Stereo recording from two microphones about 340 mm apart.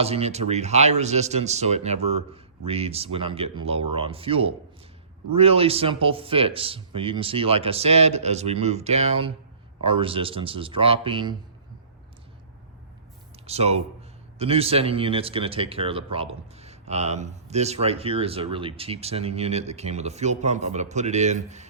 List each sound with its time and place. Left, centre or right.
0.0 s speech: centre
13.5 s speech: centre